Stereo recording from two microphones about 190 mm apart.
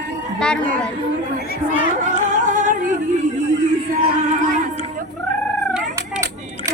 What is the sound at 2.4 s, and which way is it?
Singing, 40° right (ahead or behind).